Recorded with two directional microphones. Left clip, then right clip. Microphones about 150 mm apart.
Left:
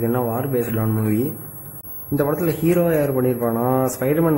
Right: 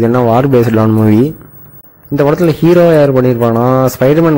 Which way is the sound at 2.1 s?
30° right (ahead or behind).